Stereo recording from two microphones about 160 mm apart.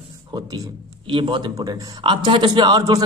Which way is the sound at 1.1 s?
30° right (ahead or behind).